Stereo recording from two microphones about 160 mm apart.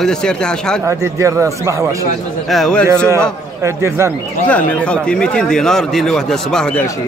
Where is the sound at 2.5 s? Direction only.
5° left (ahead or behind).